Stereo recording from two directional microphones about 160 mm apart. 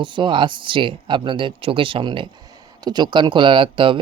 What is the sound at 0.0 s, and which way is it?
Speech, 30° right (ahead or behind).